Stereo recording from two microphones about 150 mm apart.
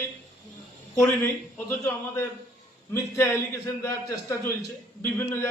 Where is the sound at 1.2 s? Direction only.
15° left (ahead or behind).